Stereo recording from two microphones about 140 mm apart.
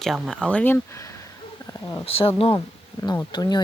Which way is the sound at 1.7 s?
25° left (ahead or behind).